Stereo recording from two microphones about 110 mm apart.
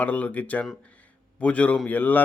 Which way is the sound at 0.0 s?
15° left (ahead or behind).